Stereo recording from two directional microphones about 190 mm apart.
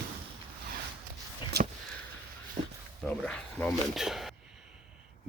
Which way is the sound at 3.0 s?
5° left (ahead or behind).